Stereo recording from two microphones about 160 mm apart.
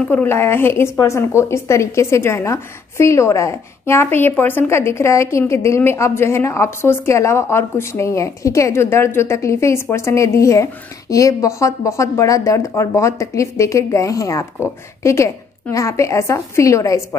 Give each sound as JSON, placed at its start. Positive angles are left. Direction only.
{"t": 0.1, "sound": "a woman's voice", "side_deg": 15}